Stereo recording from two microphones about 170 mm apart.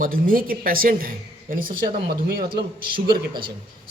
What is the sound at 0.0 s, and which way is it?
Speech, 55° right (ahead or behind).